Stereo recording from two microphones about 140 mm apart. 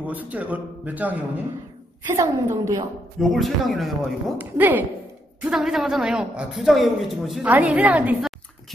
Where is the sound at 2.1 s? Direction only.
20° right (ahead or behind).